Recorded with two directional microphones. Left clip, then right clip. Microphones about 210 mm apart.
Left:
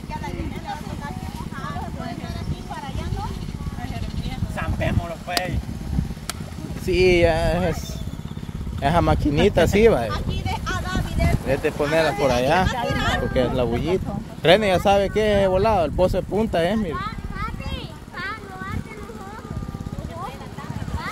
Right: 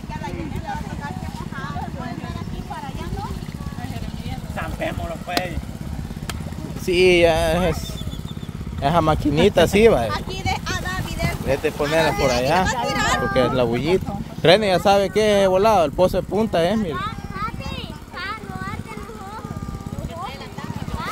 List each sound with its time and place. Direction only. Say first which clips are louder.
4.6 s a sound: even; 10° left (ahead or behind)
6.9 s speech: right 2 dB; 5° right (ahead or behind)
8.8 s speech: right 2 dB; centre (ahead or behind)
10.1 s a sound: right 4 dB; 60° right (ahead or behind)
11.4 s speech: right 2 dB; 5° right (ahead or behind)
12.8 s a sound: right 3 dB; 60° right (ahead or behind)
13.6 s speech: right 3 dB; 15° right (ahead or behind)
14.4 s speech: right 1 dB; centre (ahead or behind)
16.9 s clip-clop: right 2 dB; 25° right (ahead or behind)